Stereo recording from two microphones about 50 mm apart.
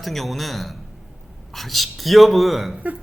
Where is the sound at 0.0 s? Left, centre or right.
Centre.